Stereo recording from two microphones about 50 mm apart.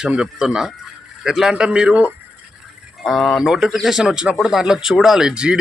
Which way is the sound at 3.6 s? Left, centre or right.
Centre.